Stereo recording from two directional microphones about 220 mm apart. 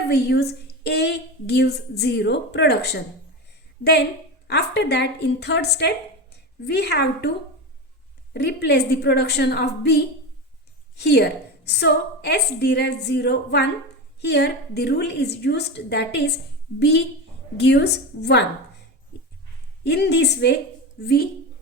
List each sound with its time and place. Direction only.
0.1 s a woman's voice: 45° left (ahead or behind)
4.4 s a woman's voice: 50° left (ahead or behind)
17.6 s a woman's voice: 50° left (ahead or behind)
19.8 s a woman's voice: 50° left (ahead or behind)